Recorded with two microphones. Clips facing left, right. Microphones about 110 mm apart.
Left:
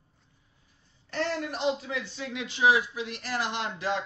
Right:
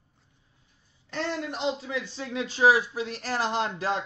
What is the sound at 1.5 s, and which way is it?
Speech, 25° right (ahead or behind).